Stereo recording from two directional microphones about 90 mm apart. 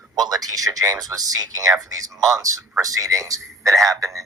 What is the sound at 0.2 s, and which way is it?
Speech, 45° right (ahead or behind).